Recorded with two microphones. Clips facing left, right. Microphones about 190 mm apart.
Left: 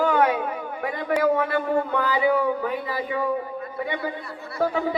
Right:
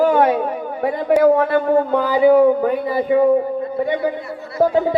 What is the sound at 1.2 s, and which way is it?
A man's voice, 45° right (ahead or behind).